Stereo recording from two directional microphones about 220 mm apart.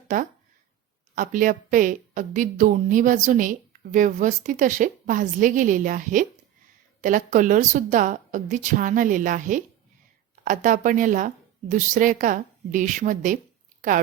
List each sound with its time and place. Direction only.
1.1 s speech: 35° right (ahead or behind)